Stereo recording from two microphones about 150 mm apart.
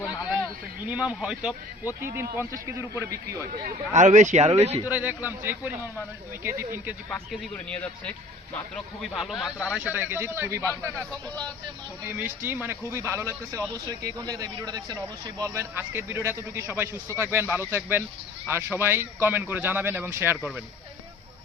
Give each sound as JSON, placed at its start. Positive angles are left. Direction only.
{"t": 0.9, "sound": "a man's voice", "side_deg": -5}
{"t": 2.3, "sound": "a man's voice", "side_deg": -15}
{"t": 3.5, "sound": "speech", "side_deg": -70}
{"t": 4.9, "sound": "a man's voice", "side_deg": -10}
{"t": 7.1, "sound": "a man's voice", "side_deg": 5}
{"t": 12.0, "sound": "a man's voice", "side_deg": -10}